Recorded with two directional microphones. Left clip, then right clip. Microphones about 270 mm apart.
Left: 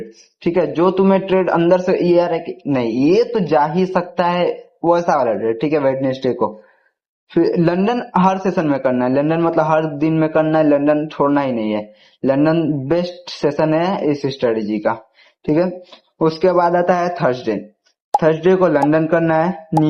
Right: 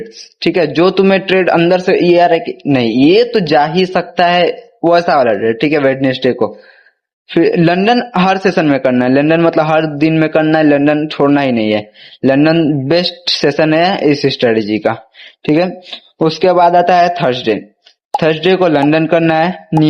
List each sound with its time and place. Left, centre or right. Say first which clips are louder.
0.4 s a man's voice: right 5 dB; right
5.1 s a man's voice: right 6 dB; right